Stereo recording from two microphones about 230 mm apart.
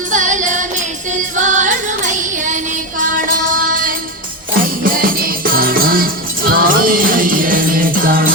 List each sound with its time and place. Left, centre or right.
0.1 s music: right